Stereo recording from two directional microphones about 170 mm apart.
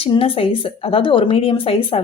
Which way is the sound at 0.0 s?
35° left (ahead or behind).